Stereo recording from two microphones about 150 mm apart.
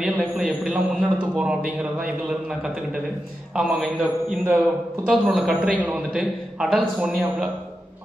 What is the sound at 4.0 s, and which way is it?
A man's voice, 10° right (ahead or behind).